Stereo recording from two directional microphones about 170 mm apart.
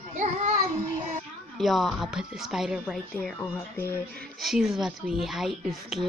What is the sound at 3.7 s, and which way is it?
Speech, 15° left (ahead or behind).